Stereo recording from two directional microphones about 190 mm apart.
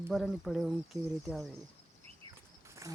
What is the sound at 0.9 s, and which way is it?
Speech, 15° right (ahead or behind).